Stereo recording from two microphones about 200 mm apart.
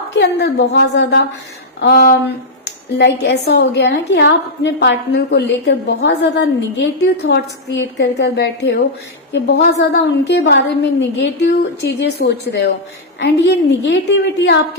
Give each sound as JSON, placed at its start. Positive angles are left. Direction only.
{"t": 0.2, "sound": "a woman's voice", "side_deg": 60}